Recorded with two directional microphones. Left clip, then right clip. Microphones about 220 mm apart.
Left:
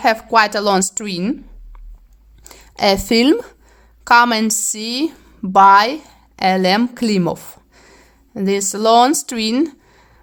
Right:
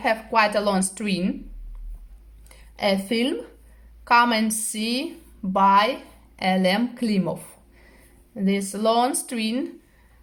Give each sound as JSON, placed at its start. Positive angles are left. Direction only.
{"t": 0.0, "sound": "a woman's voice", "side_deg": 45}
{"t": 2.4, "sound": "a woman's voice", "side_deg": 40}